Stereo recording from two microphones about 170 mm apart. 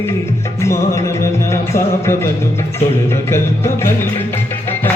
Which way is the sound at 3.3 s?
15° left (ahead or behind).